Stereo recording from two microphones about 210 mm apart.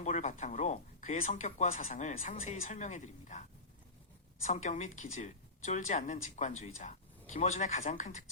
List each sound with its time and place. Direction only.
0.0 s speech: 35° left (ahead or behind)
4.4 s speech: 30° left (ahead or behind)